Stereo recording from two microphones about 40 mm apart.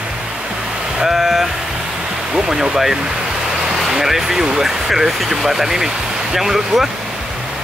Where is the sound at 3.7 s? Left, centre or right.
Centre.